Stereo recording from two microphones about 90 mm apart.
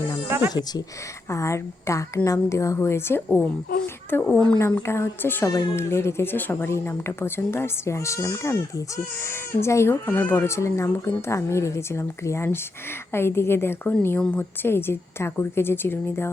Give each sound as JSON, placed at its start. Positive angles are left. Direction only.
{"t": 0.3, "sound": "speech", "side_deg": -25}
{"t": 1.3, "sound": "speech", "side_deg": 35}
{"t": 4.1, "sound": "speech", "side_deg": 15}
{"t": 4.9, "sound": "speech", "side_deg": 25}